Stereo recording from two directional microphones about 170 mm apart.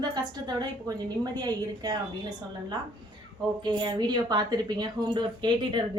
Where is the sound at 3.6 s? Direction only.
25° right (ahead or behind).